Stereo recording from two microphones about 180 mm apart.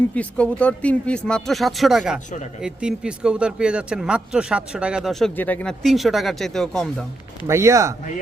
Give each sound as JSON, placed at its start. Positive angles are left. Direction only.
{"t": 0.1, "sound": "speech", "side_deg": 5}
{"t": 5.4, "sound": "speech", "side_deg": 10}
{"t": 7.4, "sound": "speech", "side_deg": -15}